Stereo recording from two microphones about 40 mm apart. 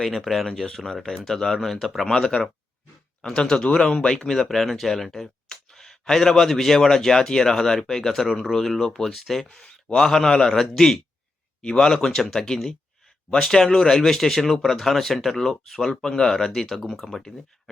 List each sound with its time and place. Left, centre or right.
0.0 s speech: centre
0.4 s speech: centre